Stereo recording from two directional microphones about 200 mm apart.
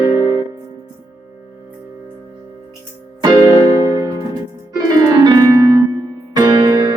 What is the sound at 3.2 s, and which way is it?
Music, 20° right (ahead or behind).